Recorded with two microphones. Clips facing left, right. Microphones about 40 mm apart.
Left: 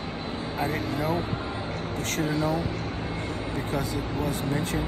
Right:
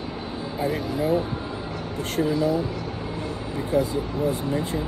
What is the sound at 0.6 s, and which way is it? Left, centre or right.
Speech, left.